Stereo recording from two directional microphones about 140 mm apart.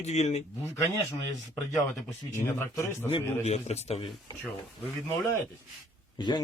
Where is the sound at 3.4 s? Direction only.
50° left (ahead or behind).